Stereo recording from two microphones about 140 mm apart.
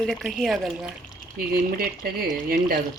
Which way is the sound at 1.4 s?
90° right.